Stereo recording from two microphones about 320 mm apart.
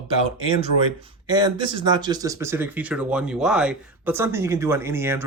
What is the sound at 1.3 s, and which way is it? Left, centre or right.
Speech, centre.